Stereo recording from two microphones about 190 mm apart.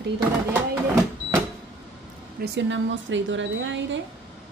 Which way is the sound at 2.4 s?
65° right (ahead or behind).